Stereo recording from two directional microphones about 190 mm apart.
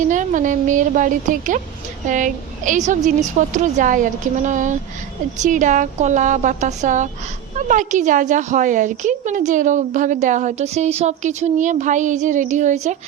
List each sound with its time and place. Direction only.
0.0 s a woman's voice: 40° right (ahead or behind)